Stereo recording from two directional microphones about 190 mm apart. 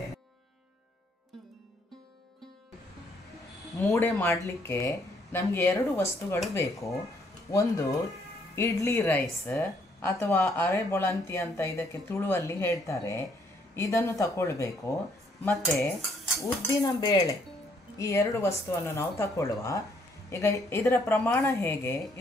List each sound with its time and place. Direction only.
3.9 s speech: 15° left (ahead or behind)
16.3 s speech: 15° left (ahead or behind)